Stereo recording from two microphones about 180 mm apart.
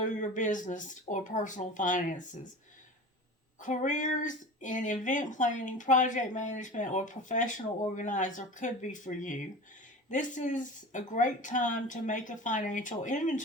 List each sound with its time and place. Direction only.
0.0 s speech: 45° left (ahead or behind)
3.6 s speech: 45° left (ahead or behind)